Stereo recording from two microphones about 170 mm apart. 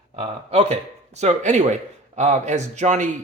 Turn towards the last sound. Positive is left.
turn(degrees=-45)  # may be behind; listen again after turning